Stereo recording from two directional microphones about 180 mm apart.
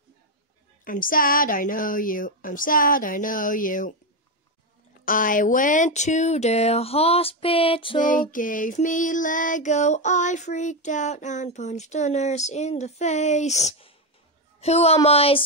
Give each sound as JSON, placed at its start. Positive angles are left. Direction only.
{"t": 0.8, "sound": "a woman's voice", "side_deg": 50}
{"t": 5.0, "sound": "a woman's voice", "side_deg": 50}
{"t": 5.9, "sound": "child singing", "side_deg": 40}
{"t": 8.0, "sound": "child singing", "side_deg": 50}
{"t": 14.6, "sound": "a woman's voice", "side_deg": 35}
{"t": 15.0, "sound": "child singing", "side_deg": 35}